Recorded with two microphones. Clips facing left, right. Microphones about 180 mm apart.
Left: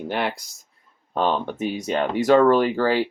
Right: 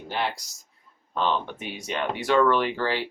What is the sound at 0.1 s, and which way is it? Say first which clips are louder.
Speech: left 2 dB; 60° left (ahead or behind).